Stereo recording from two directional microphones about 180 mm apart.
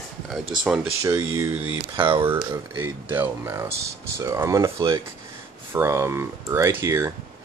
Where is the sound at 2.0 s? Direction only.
30° right (ahead or behind).